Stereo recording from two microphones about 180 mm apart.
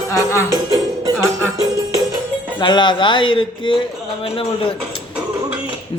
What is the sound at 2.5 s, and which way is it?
A man's voice, 25° left (ahead or behind).